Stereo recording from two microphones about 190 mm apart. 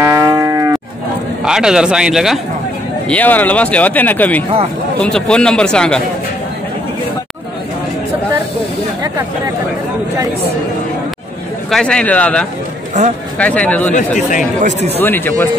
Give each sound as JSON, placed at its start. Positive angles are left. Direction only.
{"t": 0.0, "sound": "moo", "side_deg": -15}
{"t": 1.4, "sound": "a man's voice", "side_deg": -5}
{"t": 3.1, "sound": "a man's voice", "side_deg": 10}
{"t": 11.7, "sound": "a man's voice", "side_deg": 5}
{"t": 13.9, "sound": "speech", "side_deg": 40}
{"t": 14.6, "sound": "a man's voice", "side_deg": -40}
{"t": 15.0, "sound": "speech", "side_deg": 10}